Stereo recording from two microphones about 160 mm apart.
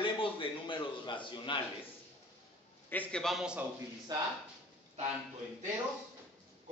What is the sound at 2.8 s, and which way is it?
Speech, 10° left (ahead or behind).